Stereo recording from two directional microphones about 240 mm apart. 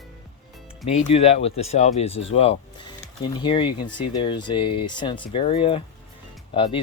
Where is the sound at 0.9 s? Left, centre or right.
Left.